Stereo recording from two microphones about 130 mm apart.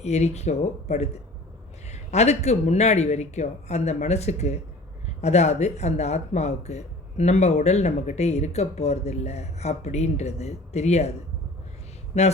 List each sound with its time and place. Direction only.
0.0 s speech: 60° left (ahead or behind)
12.1 s speech: 60° left (ahead or behind)